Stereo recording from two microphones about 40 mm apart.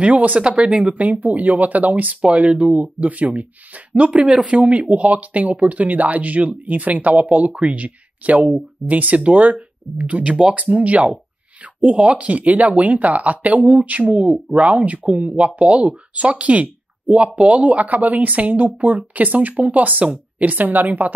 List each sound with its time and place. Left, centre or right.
0.0 s speech: right
0.4 s speech: right
0.8 s speech: right
2.2 s a woman's voice: right